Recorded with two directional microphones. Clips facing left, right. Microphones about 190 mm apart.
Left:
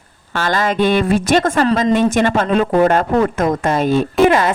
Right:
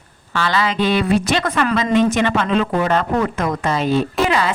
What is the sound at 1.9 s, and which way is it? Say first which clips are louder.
A woman's voice: left 2 dB; 50° left (ahead or behind).